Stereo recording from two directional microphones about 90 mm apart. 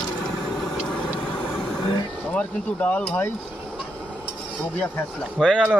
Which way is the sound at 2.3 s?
15° left (ahead or behind).